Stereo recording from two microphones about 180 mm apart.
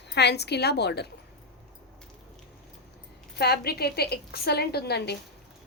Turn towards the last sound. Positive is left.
turn(degrees=65)  # may be behind; listen again after turning